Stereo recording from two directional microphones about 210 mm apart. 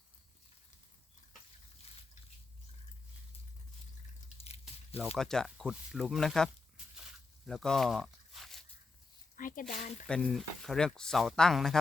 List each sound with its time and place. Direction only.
4.4 s biting: 30° left (ahead or behind)
5.1 s speech: centre (ahead or behind)
7.4 s a sound: centre (ahead or behind)
9.4 s speech: 40° left (ahead or behind)
10.1 s speech: 5° left (ahead or behind)